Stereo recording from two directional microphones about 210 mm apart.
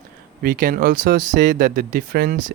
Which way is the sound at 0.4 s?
40° right (ahead or behind).